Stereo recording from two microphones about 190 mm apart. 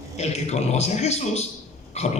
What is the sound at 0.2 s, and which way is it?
A man's voice, 35° left (ahead or behind).